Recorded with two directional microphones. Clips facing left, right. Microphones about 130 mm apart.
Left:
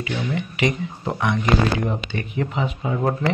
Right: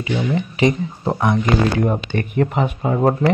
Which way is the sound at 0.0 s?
35° right (ahead or behind).